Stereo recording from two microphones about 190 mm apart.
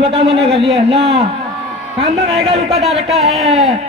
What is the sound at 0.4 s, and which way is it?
Speech, centre (ahead or behind).